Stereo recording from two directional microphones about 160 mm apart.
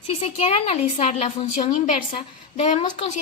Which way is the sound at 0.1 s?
40° left (ahead or behind).